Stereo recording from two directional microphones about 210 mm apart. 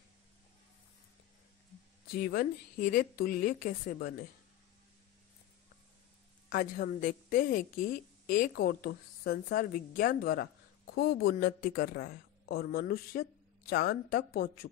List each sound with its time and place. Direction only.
2.0 s speech: 45° left (ahead or behind)
6.5 s a woman's voice: 40° left (ahead or behind)